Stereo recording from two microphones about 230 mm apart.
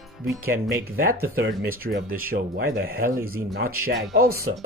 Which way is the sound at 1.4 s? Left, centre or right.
Right.